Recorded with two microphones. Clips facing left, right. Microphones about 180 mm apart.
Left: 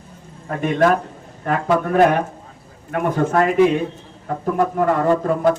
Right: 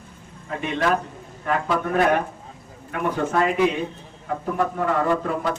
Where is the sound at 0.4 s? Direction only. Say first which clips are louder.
Left 7 dB; 50° left (ahead or behind).